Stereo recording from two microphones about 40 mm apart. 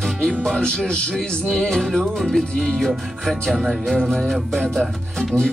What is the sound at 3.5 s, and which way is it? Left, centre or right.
Speech, centre.